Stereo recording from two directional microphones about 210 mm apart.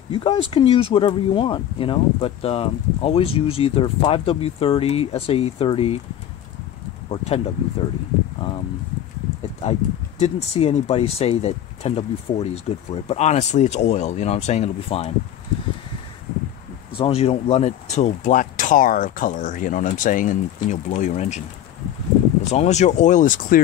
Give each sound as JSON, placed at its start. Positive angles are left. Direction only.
{"t": 0.1, "sound": "speech", "side_deg": 25}
{"t": 7.1, "sound": "speech", "side_deg": 30}
{"t": 9.6, "sound": "speech", "side_deg": 30}
{"t": 16.9, "sound": "speech", "side_deg": 25}
{"t": 22.5, "sound": "speech", "side_deg": 30}